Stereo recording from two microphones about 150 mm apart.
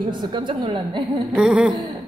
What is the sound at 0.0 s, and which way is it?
A woman's voice, 30° right (ahead or behind).